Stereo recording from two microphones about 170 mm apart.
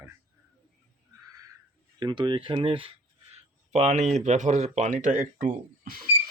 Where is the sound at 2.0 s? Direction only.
25° right (ahead or behind).